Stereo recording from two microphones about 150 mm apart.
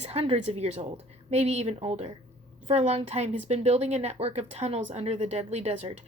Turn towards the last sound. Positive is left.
turn(degrees=-45)  # may be behind; listen again after turning